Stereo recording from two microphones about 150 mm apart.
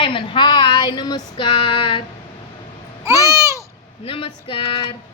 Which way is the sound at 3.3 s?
20° right (ahead or behind).